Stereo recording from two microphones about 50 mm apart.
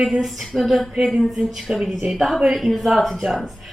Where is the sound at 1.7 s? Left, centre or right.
Centre.